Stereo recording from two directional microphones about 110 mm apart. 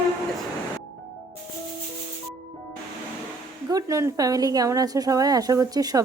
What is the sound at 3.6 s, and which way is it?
Speech, 30° right (ahead or behind).